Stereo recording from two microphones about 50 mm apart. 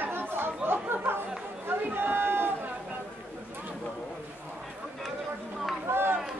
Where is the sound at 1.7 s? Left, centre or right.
Right.